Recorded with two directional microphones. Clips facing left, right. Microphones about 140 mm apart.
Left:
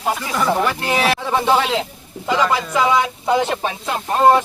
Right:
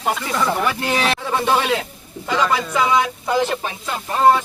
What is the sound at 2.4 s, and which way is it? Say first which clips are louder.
Speech: even; 5° left (ahead or behind).